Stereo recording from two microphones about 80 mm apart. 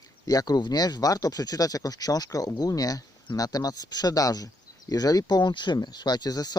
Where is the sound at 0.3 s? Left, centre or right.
Left.